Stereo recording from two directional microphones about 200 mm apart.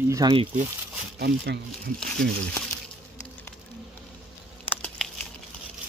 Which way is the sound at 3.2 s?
5° left (ahead or behind).